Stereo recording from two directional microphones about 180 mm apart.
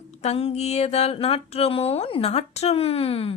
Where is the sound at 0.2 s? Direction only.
35° left (ahead or behind).